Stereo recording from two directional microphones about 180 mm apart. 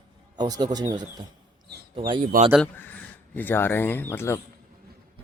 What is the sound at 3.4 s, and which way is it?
Speech, 10° left (ahead or behind).